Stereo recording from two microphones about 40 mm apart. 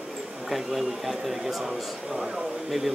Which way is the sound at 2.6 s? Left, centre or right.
Centre.